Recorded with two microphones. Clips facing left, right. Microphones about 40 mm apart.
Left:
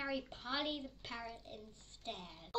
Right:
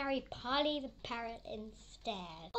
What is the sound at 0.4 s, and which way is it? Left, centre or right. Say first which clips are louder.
A child's voice: right 5 dB; right.